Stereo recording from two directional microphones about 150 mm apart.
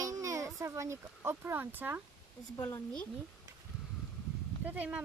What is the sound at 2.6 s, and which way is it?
Speech, 15° left (ahead or behind).